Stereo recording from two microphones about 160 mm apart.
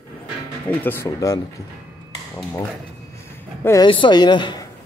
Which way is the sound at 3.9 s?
30° left (ahead or behind).